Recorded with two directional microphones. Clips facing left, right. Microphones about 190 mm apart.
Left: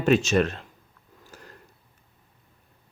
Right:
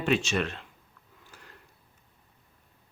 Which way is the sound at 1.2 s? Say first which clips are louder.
Left 6 dB; 40° left (ahead or behind).